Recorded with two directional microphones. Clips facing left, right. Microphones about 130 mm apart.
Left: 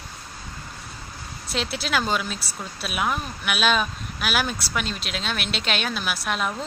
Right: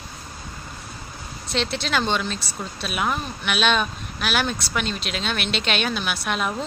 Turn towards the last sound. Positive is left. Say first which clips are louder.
# right 1 dB
turn(degrees=0)  # may be behind; listen again after turning